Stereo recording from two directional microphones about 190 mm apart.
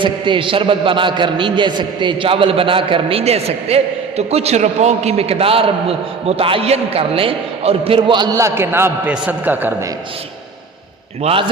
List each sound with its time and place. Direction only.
0.0 s a man's voice: 25° right (ahead or behind); by 9.7 s 10° right (ahead or behind)
11.2 s a man's voice: 30° right (ahead or behind)